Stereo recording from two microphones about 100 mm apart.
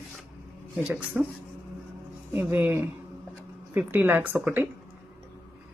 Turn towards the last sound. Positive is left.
turn(degrees=-20)  # may be behind; listen again after turning